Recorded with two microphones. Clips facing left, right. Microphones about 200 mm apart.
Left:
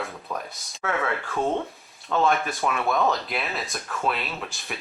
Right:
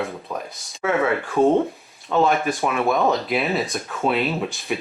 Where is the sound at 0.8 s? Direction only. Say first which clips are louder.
Right 7 dB; 20° right (ahead or behind).